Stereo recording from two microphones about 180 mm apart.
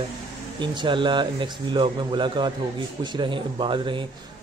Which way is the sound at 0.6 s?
25° right (ahead or behind).